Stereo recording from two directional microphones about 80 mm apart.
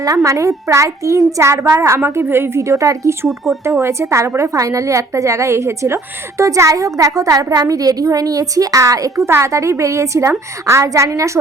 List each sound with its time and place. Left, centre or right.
0.0 s a woman's voice: right
3.2 s speech: centre
3.6 s a woman's voice: right